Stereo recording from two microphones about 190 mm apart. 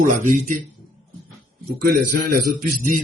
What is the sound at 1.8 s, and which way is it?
Speech, 50° right (ahead or behind).